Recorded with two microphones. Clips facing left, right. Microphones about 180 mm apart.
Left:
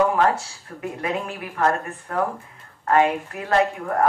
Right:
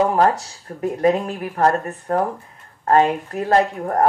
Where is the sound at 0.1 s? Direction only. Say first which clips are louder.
Right 3 dB; 40° right (ahead or behind).